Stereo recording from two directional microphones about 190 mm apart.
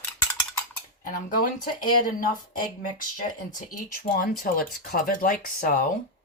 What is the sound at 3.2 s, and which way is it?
Speech, 40° left (ahead or behind).